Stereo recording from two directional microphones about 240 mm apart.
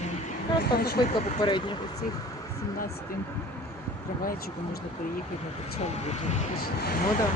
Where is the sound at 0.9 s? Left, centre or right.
Centre.